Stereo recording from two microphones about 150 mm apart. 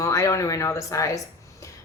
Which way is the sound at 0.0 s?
20° left (ahead or behind).